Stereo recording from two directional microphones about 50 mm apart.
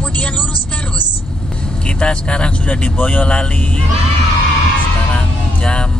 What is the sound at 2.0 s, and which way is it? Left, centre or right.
Speech, left.